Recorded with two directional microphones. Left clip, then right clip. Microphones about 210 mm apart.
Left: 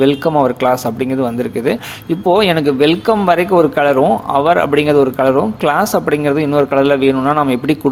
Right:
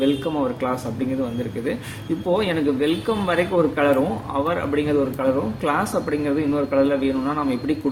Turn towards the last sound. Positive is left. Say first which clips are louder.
# left 10 dB
turn(degrees=45)  # may be behind; listen again after turning